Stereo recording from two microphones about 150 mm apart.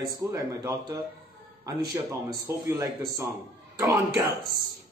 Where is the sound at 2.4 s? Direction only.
20° right (ahead or behind).